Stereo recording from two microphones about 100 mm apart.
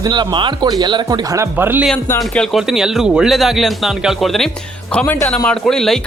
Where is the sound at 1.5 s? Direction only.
20° right (ahead or behind).